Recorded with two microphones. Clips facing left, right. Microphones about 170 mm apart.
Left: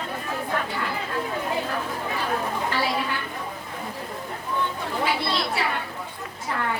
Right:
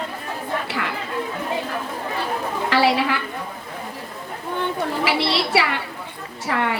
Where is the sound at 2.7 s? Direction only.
80° right.